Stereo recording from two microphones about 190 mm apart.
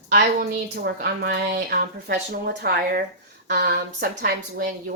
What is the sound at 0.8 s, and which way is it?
A woman's voice, 55° right (ahead or behind).